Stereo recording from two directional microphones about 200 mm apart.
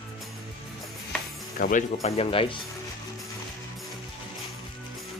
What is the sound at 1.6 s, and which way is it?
Speech, 40° left (ahead or behind).